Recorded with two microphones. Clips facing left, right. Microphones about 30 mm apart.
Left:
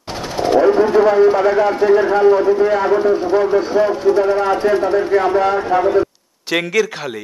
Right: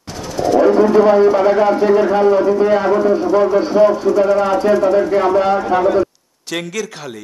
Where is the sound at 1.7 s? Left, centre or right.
Centre.